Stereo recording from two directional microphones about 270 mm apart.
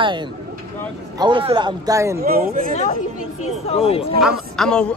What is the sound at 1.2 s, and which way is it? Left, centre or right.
Speech, centre.